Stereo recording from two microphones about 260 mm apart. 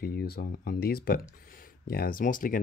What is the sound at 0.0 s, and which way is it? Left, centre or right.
Speech, left.